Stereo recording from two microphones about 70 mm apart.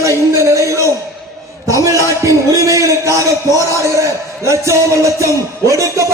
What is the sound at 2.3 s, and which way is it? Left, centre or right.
A man's voice, right.